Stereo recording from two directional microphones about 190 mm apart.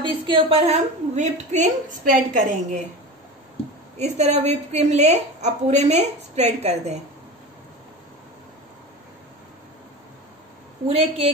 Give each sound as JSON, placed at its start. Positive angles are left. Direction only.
{"t": 0.0, "sound": "a woman's voice", "side_deg": -30}
{"t": 4.0, "sound": "a woman's voice", "side_deg": -35}
{"t": 10.9, "sound": "a woman's voice", "side_deg": -30}